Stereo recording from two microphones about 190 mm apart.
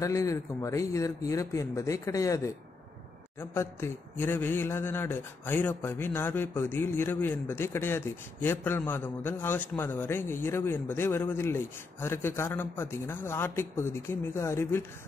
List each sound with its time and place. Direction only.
0.0 s speech: 15° left (ahead or behind)